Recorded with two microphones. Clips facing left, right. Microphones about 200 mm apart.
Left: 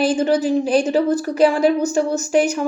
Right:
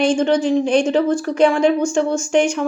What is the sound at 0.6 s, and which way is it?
Speech, 35° left (ahead or behind).